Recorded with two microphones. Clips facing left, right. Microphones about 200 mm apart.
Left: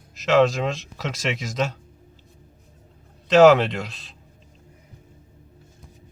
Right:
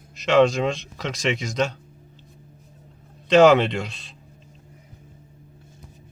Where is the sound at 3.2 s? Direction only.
Centre (ahead or behind).